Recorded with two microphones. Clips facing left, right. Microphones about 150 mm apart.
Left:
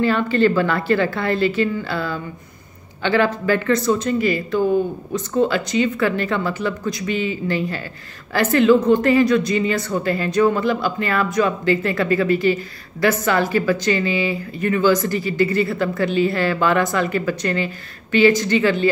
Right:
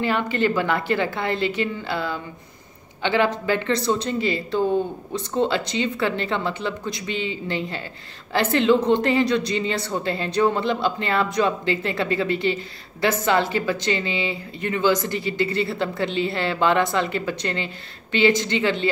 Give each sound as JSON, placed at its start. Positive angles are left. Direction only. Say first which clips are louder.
{"t": 0.0, "sound": "speech", "louder": "left 5 dB", "side_deg": -15}